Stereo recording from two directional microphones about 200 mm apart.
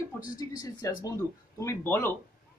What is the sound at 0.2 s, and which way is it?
A man's voice, 15° left (ahead or behind).